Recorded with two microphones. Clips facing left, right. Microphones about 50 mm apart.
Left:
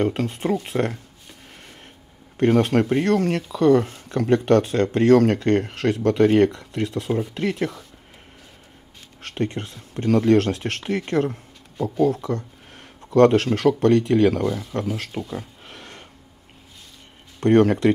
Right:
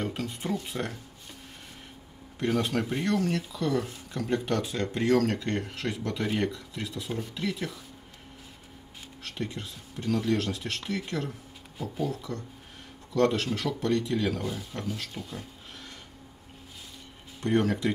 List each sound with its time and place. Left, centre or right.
0.0 s speech: left
2.3 s speech: left
9.2 s speech: left
15.0 s speech: left
15.7 s a sound: left
17.4 s speech: left